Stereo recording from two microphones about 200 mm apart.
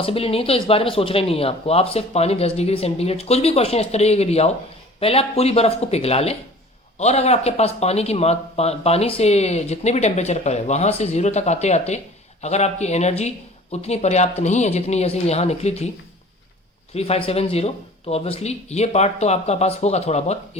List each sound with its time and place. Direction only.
0.0 s speech: 30° left (ahead or behind)
16.9 s speech: 30° left (ahead or behind)